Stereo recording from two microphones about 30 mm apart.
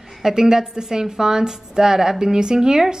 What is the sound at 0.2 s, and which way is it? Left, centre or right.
A woman's voice, centre.